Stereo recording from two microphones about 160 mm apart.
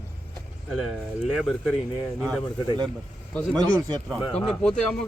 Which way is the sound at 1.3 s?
Centre (ahead or behind).